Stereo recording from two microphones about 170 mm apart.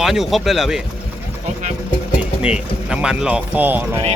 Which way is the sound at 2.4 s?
5° right (ahead or behind).